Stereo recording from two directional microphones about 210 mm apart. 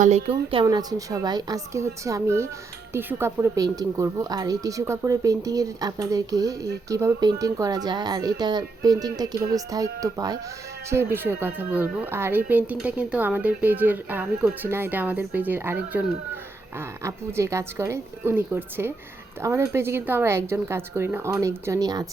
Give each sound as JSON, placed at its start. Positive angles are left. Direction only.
{"t": 0.0, "sound": "speech", "side_deg": -30}